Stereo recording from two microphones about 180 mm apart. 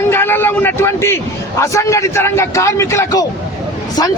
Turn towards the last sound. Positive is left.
turn(degrees=15)  # may be behind; listen again after turning